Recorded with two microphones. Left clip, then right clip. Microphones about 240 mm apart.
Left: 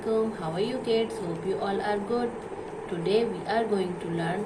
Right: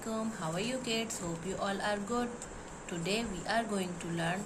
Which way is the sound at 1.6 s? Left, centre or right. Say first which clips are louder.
Left 4 dB; right.